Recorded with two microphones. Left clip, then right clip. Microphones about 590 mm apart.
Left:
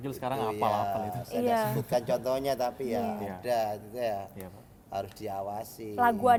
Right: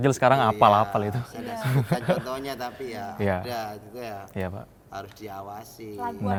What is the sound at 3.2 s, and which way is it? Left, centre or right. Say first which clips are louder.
Speech: right 12 dB; right.